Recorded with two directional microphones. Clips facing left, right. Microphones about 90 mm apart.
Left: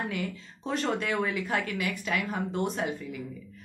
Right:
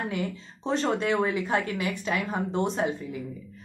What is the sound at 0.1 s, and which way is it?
A woman's voice, 25° right (ahead or behind).